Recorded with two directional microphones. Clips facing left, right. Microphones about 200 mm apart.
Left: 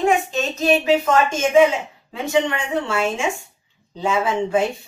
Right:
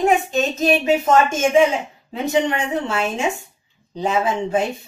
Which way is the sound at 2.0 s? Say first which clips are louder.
Right 1 dB; 20° right (ahead or behind).